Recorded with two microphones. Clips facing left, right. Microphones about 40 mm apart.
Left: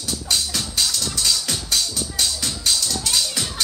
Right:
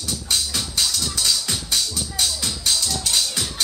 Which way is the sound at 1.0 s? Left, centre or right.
Centre.